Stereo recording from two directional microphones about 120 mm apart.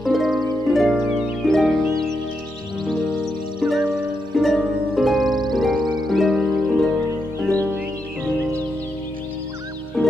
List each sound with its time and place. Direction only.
0.0 s music: centre (ahead or behind)
0.7 s harp: centre (ahead or behind)
3.5 s music: centre (ahead or behind)
4.4 s harp: centre (ahead or behind)
5.2 s music: 35° right (ahead or behind)
5.5 s music: centre (ahead or behind)